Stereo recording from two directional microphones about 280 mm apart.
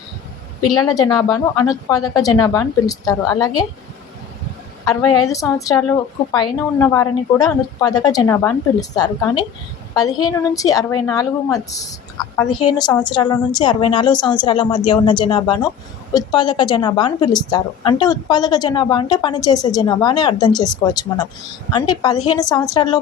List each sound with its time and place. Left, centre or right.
0.8 s a woman's voice: centre
5.3 s a woman's voice: centre